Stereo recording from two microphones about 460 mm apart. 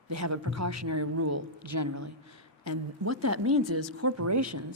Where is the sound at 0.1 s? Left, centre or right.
Right.